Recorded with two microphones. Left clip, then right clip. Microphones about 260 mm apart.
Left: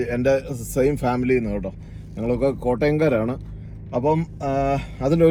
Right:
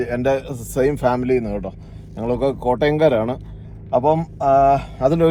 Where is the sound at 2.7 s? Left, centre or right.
Centre.